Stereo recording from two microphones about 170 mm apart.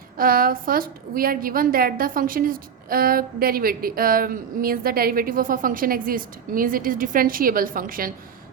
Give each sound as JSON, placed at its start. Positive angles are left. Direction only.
{"t": 0.2, "sound": "a woman's voice", "side_deg": -55}